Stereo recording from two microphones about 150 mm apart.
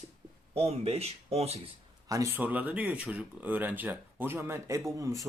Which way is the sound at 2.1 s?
20° right (ahead or behind).